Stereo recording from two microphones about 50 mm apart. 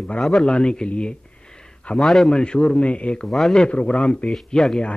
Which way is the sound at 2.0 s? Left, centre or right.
Centre.